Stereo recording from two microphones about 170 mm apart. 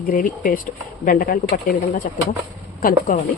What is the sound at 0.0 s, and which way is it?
Speech, 50° left (ahead or behind).